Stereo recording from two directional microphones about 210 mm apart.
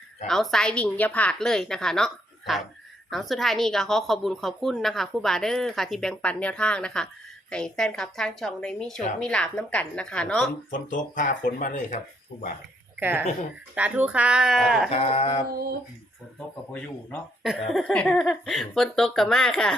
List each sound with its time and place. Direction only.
0.3 s a woman's voice: centre (ahead or behind)
10.7 s speech: 40° left (ahead or behind)
13.0 s a woman's voice: 10° right (ahead or behind)
14.8 s a sound: 30° left (ahead or behind)
17.4 s a woman's voice: centre (ahead or behind)